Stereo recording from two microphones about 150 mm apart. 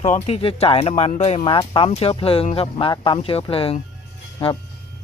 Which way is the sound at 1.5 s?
35° left (ahead or behind).